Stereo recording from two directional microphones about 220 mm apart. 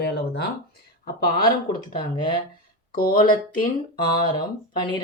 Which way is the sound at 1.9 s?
20° left (ahead or behind).